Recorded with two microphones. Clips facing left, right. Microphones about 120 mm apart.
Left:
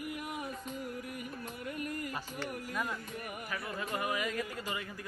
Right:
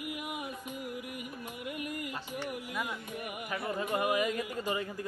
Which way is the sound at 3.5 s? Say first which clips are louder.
Right 6 dB; 20° right (ahead or behind).